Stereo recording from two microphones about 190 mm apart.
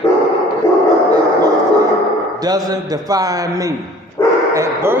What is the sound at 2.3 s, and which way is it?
A man's voice, 20° right (ahead or behind).